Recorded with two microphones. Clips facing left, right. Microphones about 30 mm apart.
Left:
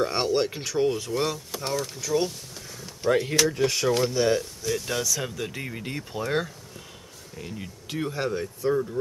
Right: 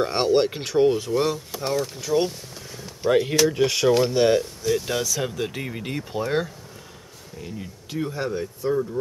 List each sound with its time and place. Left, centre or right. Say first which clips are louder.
0.0 s speech: right 4 dB; centre
2.0 s speech: right 2 dB; right
3.0 s speech: right 3 dB; centre
3.6 s speech: right 4 dB; right
4.4 s speech: right 5 dB; centre
7.3 s speech: right 2 dB; centre